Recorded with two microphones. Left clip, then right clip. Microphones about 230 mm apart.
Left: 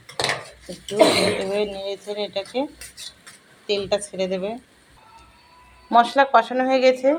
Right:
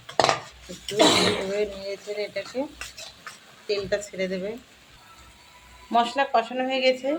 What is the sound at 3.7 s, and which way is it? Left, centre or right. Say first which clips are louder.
Speech: left 4 dB; centre.